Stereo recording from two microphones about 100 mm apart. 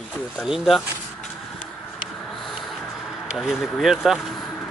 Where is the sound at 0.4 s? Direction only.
Centre (ahead or behind).